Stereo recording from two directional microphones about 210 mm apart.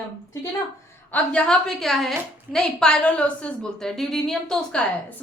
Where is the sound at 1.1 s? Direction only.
5° left (ahead or behind).